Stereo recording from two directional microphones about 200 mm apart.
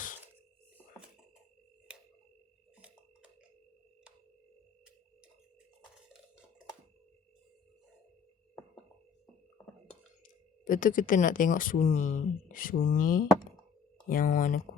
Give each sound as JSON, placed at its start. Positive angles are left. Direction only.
{"t": 10.2, "sound": "speech", "side_deg": 40}